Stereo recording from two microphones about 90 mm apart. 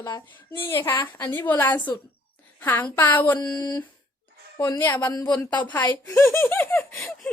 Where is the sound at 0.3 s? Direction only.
25° left (ahead or behind).